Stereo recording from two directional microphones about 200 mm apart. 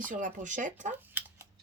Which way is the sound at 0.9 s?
10° right (ahead or behind).